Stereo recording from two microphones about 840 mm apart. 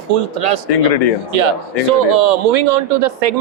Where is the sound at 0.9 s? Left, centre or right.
Left.